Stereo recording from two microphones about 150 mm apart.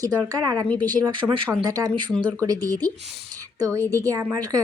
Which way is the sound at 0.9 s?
25° right (ahead or behind).